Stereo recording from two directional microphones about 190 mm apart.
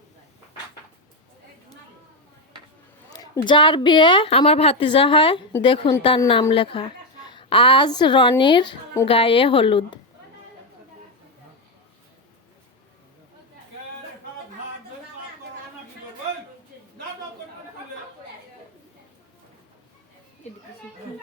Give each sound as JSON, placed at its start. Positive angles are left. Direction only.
{"t": 3.1, "sound": "a woman's voice", "side_deg": 20}